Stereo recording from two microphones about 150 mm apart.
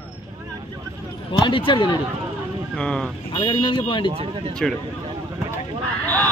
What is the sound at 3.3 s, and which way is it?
Speech, 30° left (ahead or behind).